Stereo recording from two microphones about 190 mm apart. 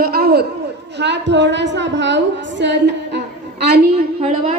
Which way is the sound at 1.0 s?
65° right (ahead or behind).